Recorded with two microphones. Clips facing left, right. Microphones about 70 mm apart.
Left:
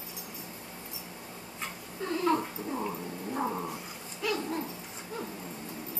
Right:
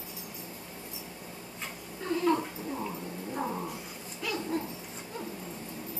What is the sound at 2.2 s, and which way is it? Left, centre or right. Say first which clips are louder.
Cat: even; centre.